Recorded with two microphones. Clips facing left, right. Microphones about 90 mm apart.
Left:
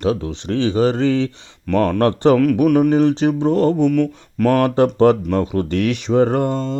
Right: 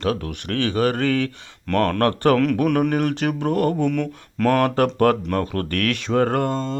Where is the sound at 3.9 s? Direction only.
5° left (ahead or behind).